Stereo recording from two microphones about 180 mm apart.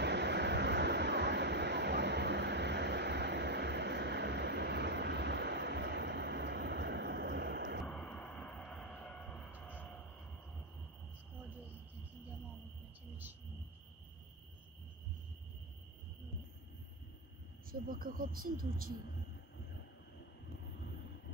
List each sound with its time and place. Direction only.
0.0 s vehicle: 70° right (ahead or behind)
7.8 s a sound: 5° left (ahead or behind)
17.6 s speech: 50° right (ahead or behind)